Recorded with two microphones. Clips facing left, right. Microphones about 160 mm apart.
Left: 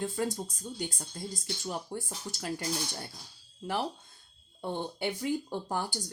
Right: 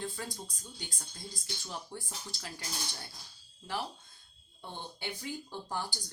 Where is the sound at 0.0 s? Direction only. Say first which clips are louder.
Left 8 dB; 50° left (ahead or behind).